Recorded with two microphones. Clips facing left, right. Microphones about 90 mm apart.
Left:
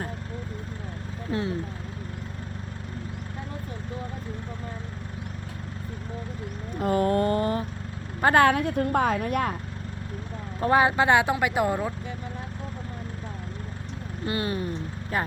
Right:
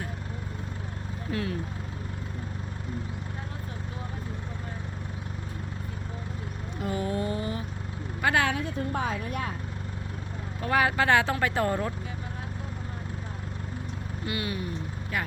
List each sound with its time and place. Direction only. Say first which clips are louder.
1.3 s speech: left 3 dB; 25° left (ahead or behind)
6.7 s mantra: left 7 dB; 45° left (ahead or behind)
8.2 s speech: left 7 dB; 45° left (ahead or behind)
10.6 s speech: left 4 dB; 30° left (ahead or behind); by 11.9 s 10° left (ahead or behind)
14.3 s speech: left 4 dB; 35° left (ahead or behind)